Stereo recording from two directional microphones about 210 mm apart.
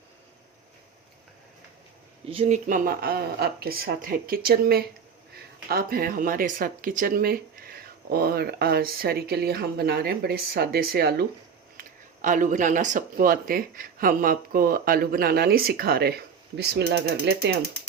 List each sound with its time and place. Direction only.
2.3 s speech: 30° right (ahead or behind); by 17.6 s 50° right (ahead or behind)